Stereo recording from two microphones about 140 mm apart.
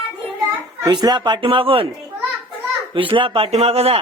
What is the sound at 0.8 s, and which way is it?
Speech, 30° right (ahead or behind).